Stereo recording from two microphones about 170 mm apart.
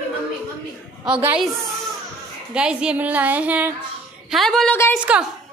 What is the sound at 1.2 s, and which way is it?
Speech, 5° right (ahead or behind).